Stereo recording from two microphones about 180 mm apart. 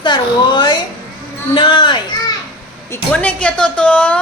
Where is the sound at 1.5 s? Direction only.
25° left (ahead or behind).